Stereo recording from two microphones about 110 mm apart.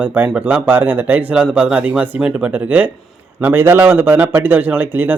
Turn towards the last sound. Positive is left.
turn(degrees=-15)  # may be behind; listen again after turning